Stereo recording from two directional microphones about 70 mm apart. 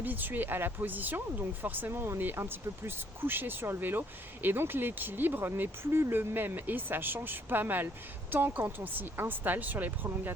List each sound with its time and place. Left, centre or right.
0.0 s speech: right